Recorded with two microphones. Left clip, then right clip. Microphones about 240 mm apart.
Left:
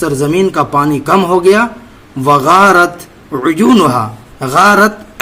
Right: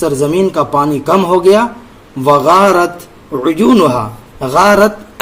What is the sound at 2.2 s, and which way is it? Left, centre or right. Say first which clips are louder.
A man's voice: left 1 dB; centre.